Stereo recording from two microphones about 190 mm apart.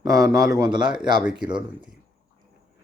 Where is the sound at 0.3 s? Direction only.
20° right (ahead or behind).